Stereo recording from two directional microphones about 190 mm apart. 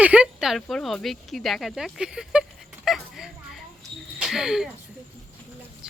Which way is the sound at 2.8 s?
Centre (ahead or behind).